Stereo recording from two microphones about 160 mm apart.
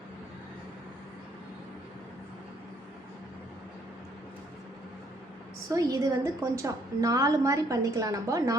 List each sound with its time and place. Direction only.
5.6 s a woman's voice: 20° right (ahead or behind)